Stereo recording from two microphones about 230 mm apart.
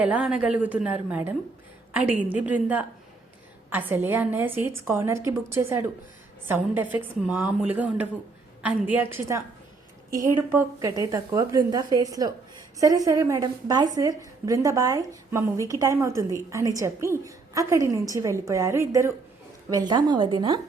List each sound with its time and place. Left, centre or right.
0.0 s a woman's voice: centre
6.9 s a woman's voice: centre